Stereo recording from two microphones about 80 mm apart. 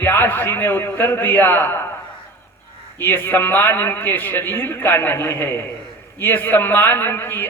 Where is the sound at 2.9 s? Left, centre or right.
Left.